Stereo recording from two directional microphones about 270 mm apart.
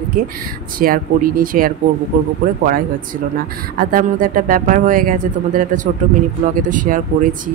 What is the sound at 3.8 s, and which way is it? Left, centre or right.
Speech, right.